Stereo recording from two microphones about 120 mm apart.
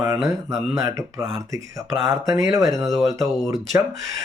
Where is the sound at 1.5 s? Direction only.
25° right (ahead or behind).